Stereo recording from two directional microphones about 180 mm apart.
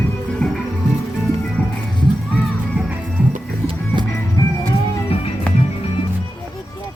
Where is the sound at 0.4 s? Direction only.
5° left (ahead or behind).